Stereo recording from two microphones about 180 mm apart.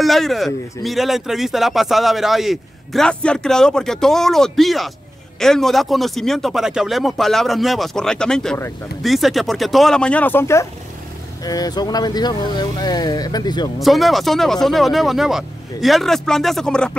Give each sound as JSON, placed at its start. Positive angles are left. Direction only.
{"t": 0.0, "sound": "a man's voice", "side_deg": 0}
{"t": 13.7, "sound": "a man's voice", "side_deg": 0}